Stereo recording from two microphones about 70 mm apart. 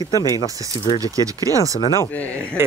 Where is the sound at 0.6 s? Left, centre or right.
Right.